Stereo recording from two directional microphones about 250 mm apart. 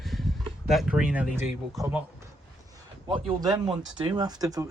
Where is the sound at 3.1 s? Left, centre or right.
Centre.